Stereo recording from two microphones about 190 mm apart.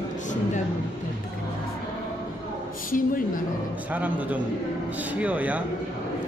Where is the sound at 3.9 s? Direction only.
10° right (ahead or behind).